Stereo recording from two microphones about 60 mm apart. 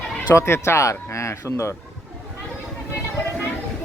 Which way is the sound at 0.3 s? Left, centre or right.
Left.